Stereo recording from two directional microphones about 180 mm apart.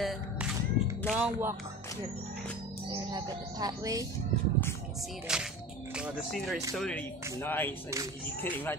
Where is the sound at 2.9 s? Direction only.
20° right (ahead or behind).